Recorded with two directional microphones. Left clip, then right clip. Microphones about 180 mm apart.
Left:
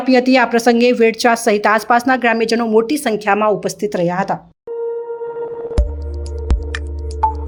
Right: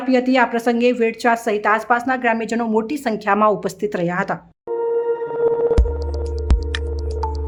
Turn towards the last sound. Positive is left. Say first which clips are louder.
# left 1 dB
turn(degrees=0)  # may be behind; listen again after turning